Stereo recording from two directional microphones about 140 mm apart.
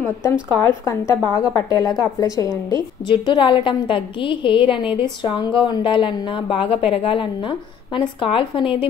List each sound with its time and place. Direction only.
0.0 s a woman's voice: 20° left (ahead or behind); by 8.8 s 40° left (ahead or behind)